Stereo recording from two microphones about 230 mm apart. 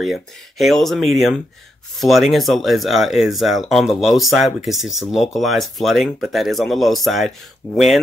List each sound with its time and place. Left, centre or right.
0.0 s speech: centre